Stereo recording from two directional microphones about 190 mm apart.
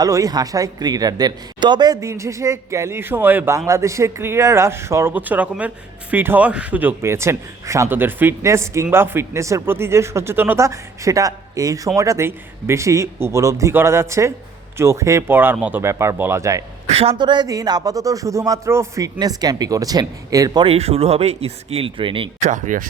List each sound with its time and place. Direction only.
0.0 s speech: 20° right (ahead or behind)
16.9 s speech: 30° right (ahead or behind)